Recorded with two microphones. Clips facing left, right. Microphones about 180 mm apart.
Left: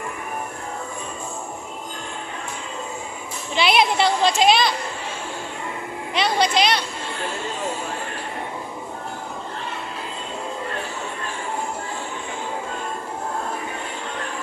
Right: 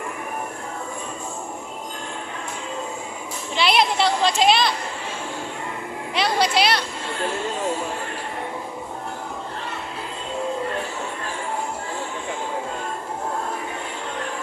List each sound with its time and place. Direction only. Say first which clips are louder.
3.6 s a woman's voice: left 1 dB; centre (ahead or behind)
6.1 s a woman's voice: left 1 dB; centre (ahead or behind)